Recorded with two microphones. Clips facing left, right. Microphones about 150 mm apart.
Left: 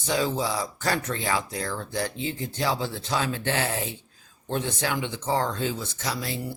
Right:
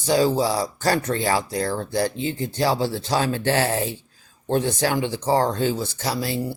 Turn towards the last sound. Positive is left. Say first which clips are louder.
# right 6 dB
turn(degrees=-35)  # may be behind; listen again after turning